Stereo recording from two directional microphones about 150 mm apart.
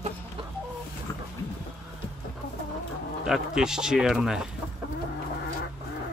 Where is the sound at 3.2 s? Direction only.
5° right (ahead or behind).